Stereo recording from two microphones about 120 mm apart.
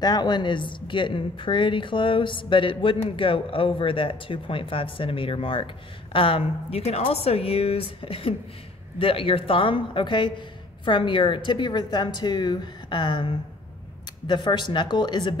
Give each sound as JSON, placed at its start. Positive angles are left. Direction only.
{"t": 0.0, "sound": "a woman's voice", "side_deg": 35}